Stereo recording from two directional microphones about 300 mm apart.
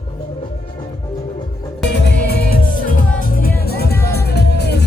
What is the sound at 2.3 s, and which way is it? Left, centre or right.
Music, left.